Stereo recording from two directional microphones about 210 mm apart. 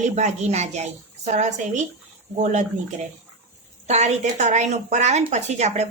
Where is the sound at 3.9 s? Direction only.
35° right (ahead or behind).